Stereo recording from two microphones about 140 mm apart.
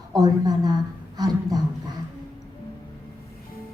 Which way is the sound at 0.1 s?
30° right (ahead or behind).